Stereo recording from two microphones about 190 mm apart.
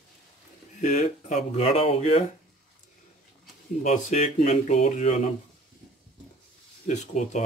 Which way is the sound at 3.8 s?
35° left (ahead or behind).